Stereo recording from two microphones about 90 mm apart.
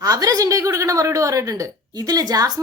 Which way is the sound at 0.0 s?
45° right (ahead or behind).